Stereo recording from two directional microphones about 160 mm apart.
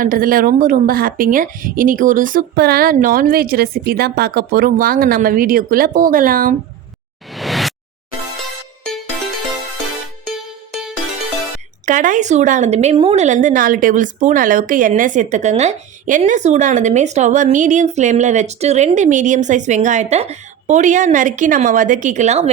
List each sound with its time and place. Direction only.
0.0 s a woman's voice: 60° right (ahead or behind)
7.3 s a sound: centre (ahead or behind)
10.2 s music: centre (ahead or behind)
11.9 s a woman's voice: 55° right (ahead or behind)